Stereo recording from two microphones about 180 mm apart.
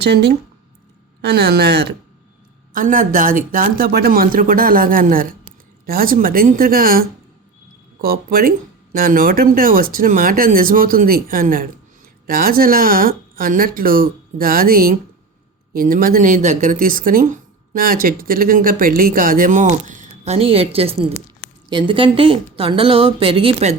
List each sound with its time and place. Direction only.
0.0 s speech: 70° right (ahead or behind)
2.7 s speech: 50° right (ahead or behind)
8.0 s a woman's voice: 55° right (ahead or behind); by 23.7 s 35° right (ahead or behind)